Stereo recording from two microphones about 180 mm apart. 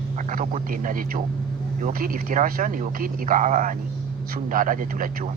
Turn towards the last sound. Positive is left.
turn(degrees=-50)  # may be behind; listen again after turning